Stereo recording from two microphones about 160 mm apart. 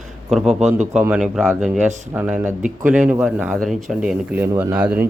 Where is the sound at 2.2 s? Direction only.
10° right (ahead or behind).